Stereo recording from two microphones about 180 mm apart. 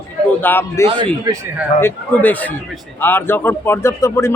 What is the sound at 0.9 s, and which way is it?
Speech, 30° right (ahead or behind).